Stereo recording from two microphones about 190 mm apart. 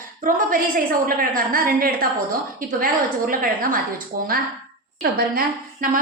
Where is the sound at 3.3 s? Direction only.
50° right (ahead or behind).